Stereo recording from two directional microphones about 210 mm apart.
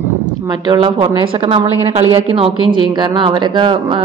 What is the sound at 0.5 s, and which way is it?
A woman's voice, 20° right (ahead or behind).